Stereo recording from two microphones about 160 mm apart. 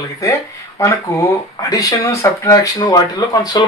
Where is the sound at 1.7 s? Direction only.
20° left (ahead or behind).